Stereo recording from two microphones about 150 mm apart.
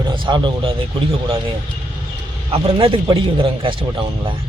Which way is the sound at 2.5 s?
35° right (ahead or behind).